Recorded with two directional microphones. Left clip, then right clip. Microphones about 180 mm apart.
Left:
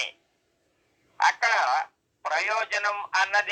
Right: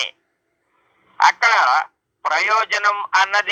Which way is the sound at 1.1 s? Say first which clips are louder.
Right 8 dB; 15° right (ahead or behind).